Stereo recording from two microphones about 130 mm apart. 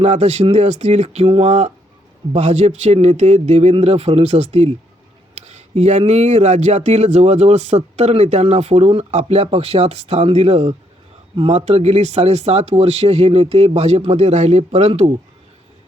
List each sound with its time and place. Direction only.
0.0 s speech: 55° right (ahead or behind)